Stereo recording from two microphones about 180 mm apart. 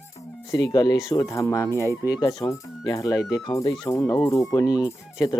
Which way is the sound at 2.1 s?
25° left (ahead or behind).